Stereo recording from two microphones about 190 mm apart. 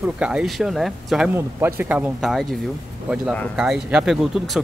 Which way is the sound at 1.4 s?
15° right (ahead or behind).